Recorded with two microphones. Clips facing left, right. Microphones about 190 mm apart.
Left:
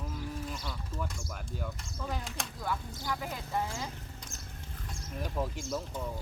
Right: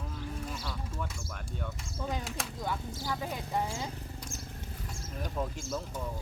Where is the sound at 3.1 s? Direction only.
20° right (ahead or behind).